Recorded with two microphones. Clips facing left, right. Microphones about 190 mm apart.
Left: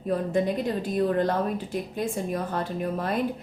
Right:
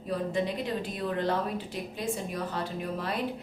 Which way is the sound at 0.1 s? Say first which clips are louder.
Left 5 dB; 50° left (ahead or behind).